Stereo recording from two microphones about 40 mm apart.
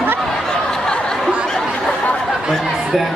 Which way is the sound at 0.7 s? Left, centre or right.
Centre.